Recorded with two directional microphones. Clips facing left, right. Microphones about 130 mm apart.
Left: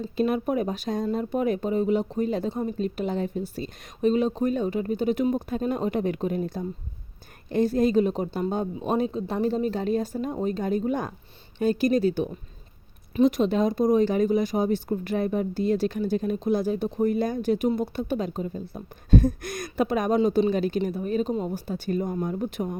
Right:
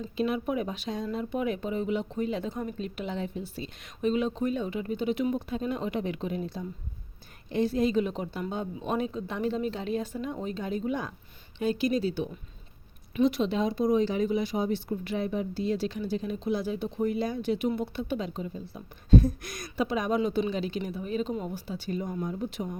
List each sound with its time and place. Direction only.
0.2 s speech: 45° left (ahead or behind)